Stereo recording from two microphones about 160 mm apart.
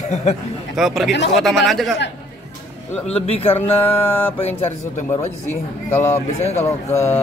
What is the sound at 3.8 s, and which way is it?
Speech, 10° left (ahead or behind).